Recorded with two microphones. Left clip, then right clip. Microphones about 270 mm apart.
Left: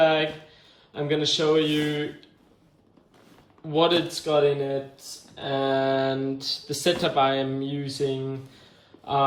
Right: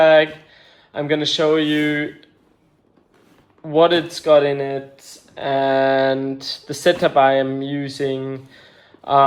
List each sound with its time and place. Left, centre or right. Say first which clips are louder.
0.0 s a sound: right 9 dB; centre
0.9 s speech: right 5 dB; centre
3.7 s speech: right 7 dB; centre
6.3 s speech: right 2 dB; centre
7.0 s speech: right 9 dB; centre